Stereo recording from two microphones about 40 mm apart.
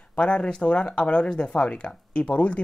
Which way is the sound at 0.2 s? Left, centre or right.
Left.